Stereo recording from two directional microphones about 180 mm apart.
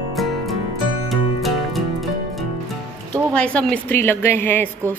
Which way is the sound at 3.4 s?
5° left (ahead or behind).